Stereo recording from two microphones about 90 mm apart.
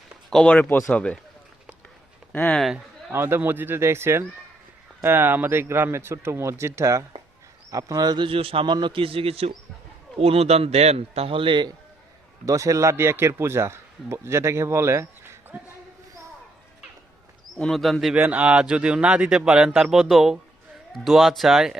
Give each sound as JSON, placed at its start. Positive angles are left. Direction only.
{"t": 0.3, "sound": "speech", "side_deg": 5}
{"t": 0.5, "sound": "speech", "side_deg": 20}
{"t": 2.5, "sound": "speech", "side_deg": 5}
{"t": 3.1, "sound": "a man's voice", "side_deg": -25}
{"t": 8.3, "sound": "a man's voice", "side_deg": -90}
{"t": 8.7, "sound": "a man's voice", "side_deg": -70}
{"t": 12.5, "sound": "a man's voice", "side_deg": -40}
{"t": 17.6, "sound": "speech", "side_deg": 0}
{"t": 18.1, "sound": "speech", "side_deg": -15}